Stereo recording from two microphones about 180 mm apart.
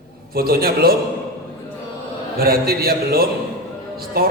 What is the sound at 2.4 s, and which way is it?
Speech, 55° right (ahead or behind).